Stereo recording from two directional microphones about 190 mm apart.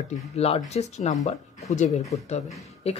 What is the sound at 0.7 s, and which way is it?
Speech, 35° left (ahead or behind).